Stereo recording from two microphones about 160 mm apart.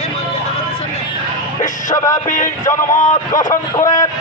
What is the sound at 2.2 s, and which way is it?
Speech, 55° left (ahead or behind).